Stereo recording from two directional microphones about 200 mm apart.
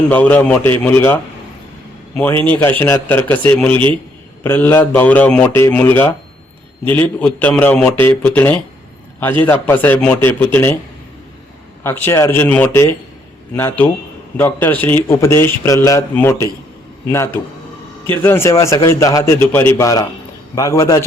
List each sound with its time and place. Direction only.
0.1 s a man's voice: 10° left (ahead or behind)
11.8 s a man's voice: 10° left (ahead or behind)